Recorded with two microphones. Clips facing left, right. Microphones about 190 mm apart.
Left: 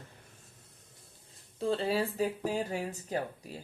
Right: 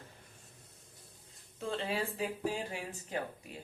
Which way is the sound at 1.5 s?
35° left (ahead or behind).